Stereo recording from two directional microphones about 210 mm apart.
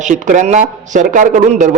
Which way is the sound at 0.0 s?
35° right (ahead or behind).